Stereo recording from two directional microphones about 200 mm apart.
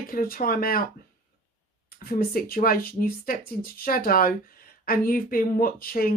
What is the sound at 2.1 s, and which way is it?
A woman's voice, 45° left (ahead or behind).